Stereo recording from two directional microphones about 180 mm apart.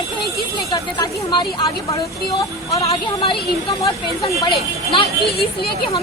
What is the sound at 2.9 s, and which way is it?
A woman's voice, 30° left (ahead or behind).